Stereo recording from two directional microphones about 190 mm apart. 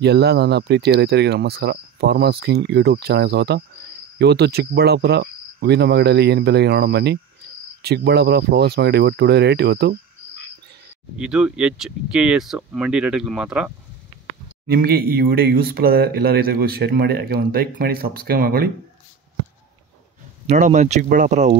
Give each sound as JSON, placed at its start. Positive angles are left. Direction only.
{"t": 0.0, "sound": "speech", "side_deg": -60}
{"t": 11.1, "sound": "speech", "side_deg": -5}
{"t": 14.7, "sound": "speech", "side_deg": -55}
{"t": 20.4, "sound": "speech", "side_deg": -40}